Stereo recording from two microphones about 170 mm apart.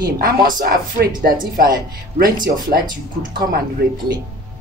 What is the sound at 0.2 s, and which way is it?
Speech, 55° right (ahead or behind).